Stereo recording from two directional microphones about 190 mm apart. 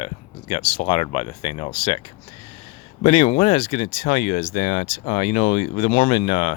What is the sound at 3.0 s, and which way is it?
Speech, 35° left (ahead or behind).